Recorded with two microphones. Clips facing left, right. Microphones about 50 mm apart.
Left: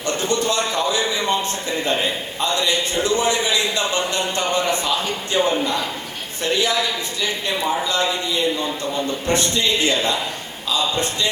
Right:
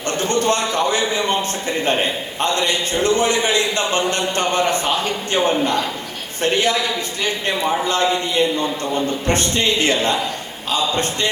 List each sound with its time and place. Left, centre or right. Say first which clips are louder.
0.1 s a sound: right 3 dB; right
2.4 s a man's voice: right 1 dB; right
7.9 s a man's voice: right 3 dB; right